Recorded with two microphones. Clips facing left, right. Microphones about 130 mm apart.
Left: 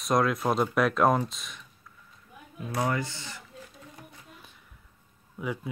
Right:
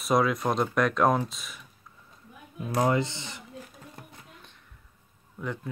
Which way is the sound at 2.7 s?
20° right (ahead or behind).